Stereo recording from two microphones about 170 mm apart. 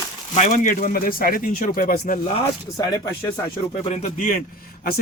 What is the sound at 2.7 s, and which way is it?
Speech, 20° left (ahead or behind).